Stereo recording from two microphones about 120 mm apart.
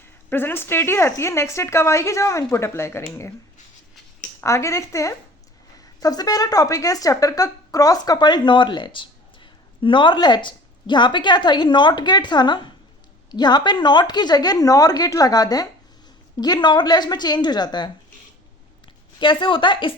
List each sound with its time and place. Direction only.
0.3 s a woman's voice: 15° left (ahead or behind)
4.4 s a woman's voice: 25° left (ahead or behind)
19.2 s a woman's voice: 40° left (ahead or behind)